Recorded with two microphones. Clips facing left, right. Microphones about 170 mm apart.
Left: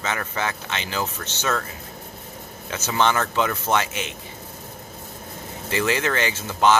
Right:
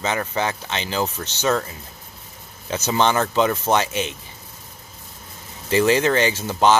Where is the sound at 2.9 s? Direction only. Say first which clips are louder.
Right 2 dB; 25° right (ahead or behind).